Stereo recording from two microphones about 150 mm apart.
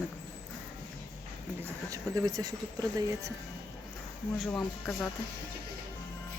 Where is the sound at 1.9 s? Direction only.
25° right (ahead or behind).